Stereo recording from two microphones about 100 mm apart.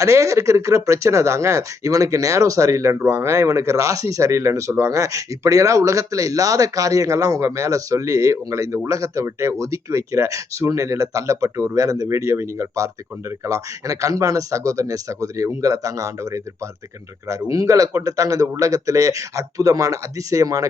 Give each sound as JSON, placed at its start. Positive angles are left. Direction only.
{"t": 0.0, "sound": "speech", "side_deg": -30}